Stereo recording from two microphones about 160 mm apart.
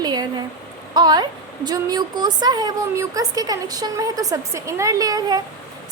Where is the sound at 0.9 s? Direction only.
25° right (ahead or behind).